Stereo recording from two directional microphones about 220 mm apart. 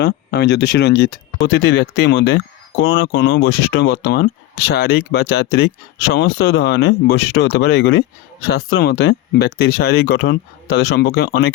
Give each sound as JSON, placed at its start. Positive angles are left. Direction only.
{"t": 0.0, "sound": "speech", "side_deg": 50}